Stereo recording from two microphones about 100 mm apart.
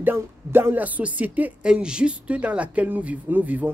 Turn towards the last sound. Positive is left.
turn(degrees=-15)  # may be behind; listen again after turning